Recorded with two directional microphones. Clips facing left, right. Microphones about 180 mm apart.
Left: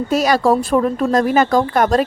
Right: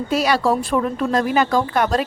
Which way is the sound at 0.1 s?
45° left (ahead or behind).